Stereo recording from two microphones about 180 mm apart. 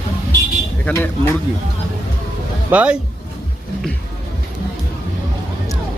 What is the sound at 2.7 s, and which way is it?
Speech, 5° right (ahead or behind).